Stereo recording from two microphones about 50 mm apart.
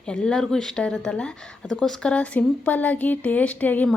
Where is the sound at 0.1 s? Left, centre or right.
Centre.